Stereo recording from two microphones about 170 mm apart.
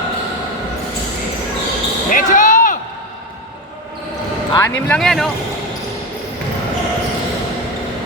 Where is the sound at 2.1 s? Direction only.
50° left (ahead or behind).